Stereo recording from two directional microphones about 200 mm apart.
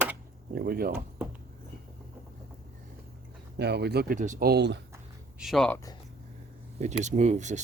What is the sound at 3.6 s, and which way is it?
Speech, 55° right (ahead or behind).